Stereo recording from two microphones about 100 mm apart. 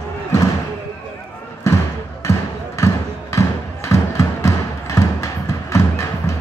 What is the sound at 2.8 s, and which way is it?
Music, 30° left (ahead or behind).